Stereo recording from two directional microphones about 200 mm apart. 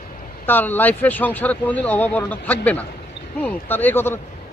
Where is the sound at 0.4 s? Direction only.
10° left (ahead or behind).